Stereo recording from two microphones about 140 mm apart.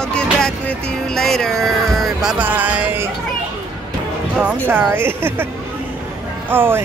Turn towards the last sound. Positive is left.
turn(degrees=-15)  # may be behind; listen again after turning